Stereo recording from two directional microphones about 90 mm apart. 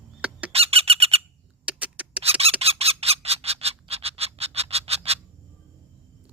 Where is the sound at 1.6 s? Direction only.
15° right (ahead or behind).